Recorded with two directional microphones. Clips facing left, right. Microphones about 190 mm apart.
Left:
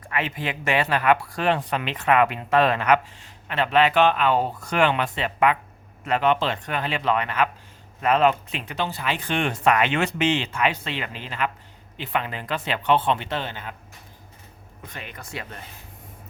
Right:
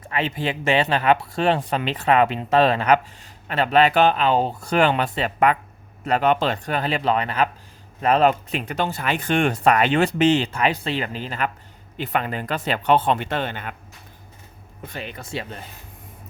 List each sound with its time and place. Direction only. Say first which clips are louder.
0.1 s speech: right 3 dB; 30° right (ahead or behind); by 13.7 s 55° right (ahead or behind)
14.9 s speech: right 5 dB; 30° right (ahead or behind)